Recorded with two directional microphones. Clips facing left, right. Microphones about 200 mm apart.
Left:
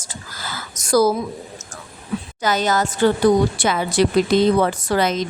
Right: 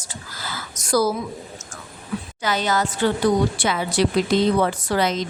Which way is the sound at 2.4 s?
45° left (ahead or behind).